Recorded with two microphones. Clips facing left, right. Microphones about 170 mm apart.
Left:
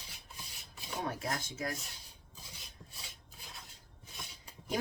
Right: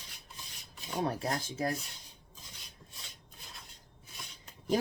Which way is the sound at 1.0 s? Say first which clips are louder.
Right 5 dB; 35° right (ahead or behind).